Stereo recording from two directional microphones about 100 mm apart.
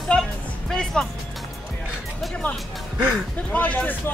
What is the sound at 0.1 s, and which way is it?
Music, 5° left (ahead or behind).